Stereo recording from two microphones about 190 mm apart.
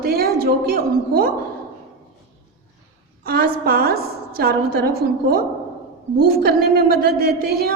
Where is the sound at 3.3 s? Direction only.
50° right (ahead or behind).